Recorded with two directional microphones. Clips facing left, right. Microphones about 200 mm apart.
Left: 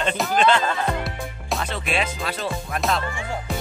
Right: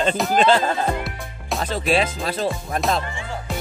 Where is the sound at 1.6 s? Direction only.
40° right (ahead or behind).